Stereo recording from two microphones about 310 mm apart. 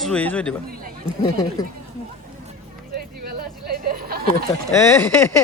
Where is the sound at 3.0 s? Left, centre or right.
Right.